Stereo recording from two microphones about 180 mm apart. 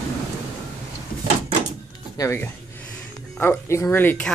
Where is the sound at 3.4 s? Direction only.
10° left (ahead or behind).